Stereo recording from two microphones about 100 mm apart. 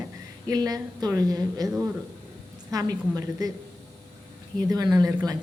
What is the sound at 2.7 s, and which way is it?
Speech, 40° right (ahead or behind).